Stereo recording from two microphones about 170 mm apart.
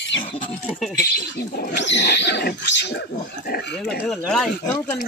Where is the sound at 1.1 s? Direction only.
65° left (ahead or behind); by 3.0 s 85° left.